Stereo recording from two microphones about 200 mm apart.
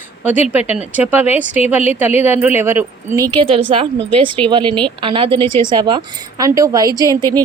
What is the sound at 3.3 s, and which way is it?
A woman's voice, 25° right (ahead or behind).